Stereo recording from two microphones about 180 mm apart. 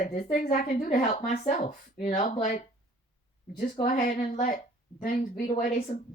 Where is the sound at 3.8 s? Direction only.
50° left (ahead or behind).